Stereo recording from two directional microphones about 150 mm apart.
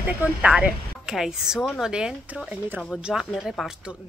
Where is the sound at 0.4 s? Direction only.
5° right (ahead or behind).